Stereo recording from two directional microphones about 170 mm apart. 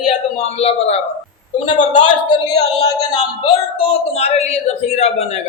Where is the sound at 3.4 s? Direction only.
35° left (ahead or behind).